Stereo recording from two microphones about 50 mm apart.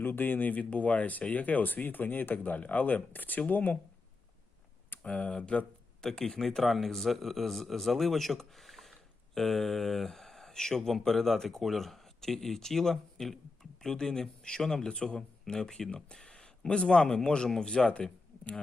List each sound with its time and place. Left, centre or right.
0.0 s speech: left
5.0 s speech: left
6.1 s a man's voice: centre